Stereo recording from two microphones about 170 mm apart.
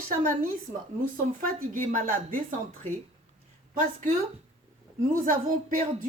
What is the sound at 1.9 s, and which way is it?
Speech, 55° right (ahead or behind).